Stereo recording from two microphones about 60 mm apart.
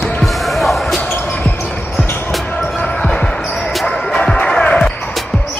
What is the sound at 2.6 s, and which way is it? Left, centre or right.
Basketball bounce, centre.